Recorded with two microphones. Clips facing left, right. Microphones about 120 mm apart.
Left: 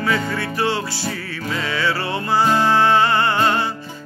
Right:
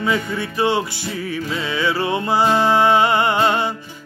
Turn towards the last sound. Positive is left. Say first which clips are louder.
# right 1 dB
turn(degrees=-20)  # may be behind; listen again after turning